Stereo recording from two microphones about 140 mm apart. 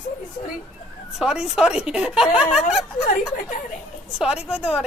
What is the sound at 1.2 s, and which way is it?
Speech, 5° right (ahead or behind).